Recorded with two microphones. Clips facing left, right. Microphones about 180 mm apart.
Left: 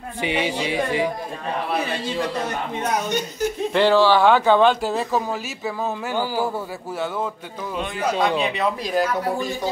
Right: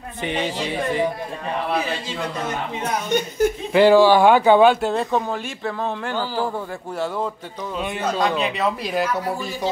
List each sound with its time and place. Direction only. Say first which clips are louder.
0.2 s speech: left 1 dB; 10° left (ahead or behind)
3.1 s speech: right 4 dB; 55° right (ahead or behind)
3.7 s speech: right 4 dB; 10° right (ahead or behind)
4.8 s speech: right 1 dB; centre (ahead or behind)
8.0 s speech: left 1 dB; 5° left (ahead or behind)